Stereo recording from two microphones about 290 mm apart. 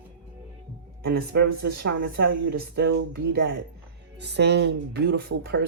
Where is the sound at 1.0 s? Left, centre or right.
Right.